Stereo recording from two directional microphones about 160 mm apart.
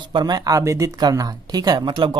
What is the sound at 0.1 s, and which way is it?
Speech, 25° right (ahead or behind).